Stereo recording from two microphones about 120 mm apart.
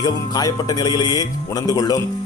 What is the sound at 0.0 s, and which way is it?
Speech, 35° left (ahead or behind).